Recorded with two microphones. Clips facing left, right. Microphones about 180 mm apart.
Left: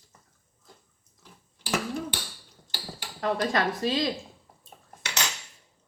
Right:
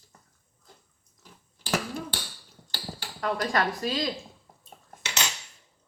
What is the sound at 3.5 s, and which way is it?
Speech, 25° left (ahead or behind).